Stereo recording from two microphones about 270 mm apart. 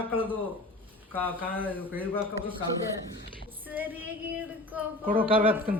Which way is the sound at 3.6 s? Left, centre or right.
Centre.